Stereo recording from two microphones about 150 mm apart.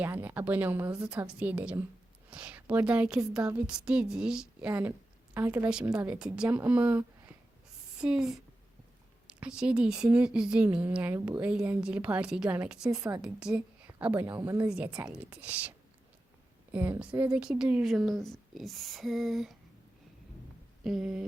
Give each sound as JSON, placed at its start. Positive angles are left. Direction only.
{"t": 0.0, "sound": "a woman's voice", "side_deg": -10}
{"t": 14.3, "sound": "speech", "side_deg": -25}
{"t": 15.1, "sound": "a woman's voice", "side_deg": -10}
{"t": 16.7, "sound": "a woman's voice", "side_deg": -10}
{"t": 20.8, "sound": "speech", "side_deg": -5}